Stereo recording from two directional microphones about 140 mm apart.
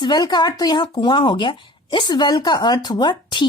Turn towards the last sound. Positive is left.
turn(degrees=35)  # may be behind; listen again after turning